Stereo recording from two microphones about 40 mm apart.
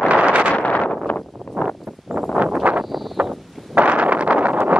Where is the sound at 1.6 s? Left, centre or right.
Right.